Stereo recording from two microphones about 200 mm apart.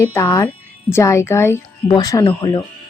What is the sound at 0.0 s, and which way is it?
A woman's voice, 15° left (ahead or behind).